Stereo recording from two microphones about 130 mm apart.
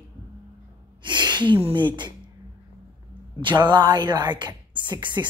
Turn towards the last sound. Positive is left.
turn(degrees=-35)  # may be behind; listen again after turning